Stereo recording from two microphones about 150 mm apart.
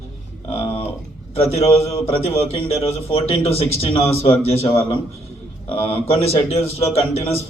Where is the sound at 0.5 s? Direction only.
40° left (ahead or behind).